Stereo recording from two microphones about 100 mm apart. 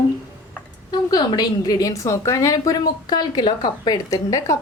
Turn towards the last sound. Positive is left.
turn(degrees=35)  # may be behind; listen again after turning